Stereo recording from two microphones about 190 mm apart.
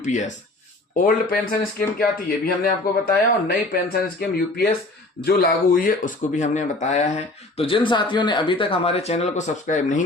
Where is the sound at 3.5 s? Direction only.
55° left (ahead or behind).